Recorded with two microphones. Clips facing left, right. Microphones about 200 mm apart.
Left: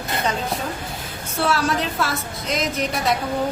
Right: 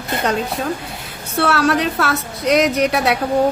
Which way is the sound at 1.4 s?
70° right (ahead or behind).